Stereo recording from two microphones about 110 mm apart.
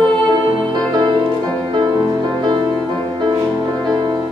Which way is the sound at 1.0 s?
40° right (ahead or behind).